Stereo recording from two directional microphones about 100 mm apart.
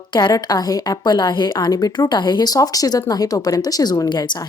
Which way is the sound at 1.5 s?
40° left (ahead or behind).